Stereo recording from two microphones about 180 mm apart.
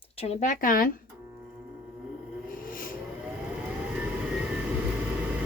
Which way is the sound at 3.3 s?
5° right (ahead or behind).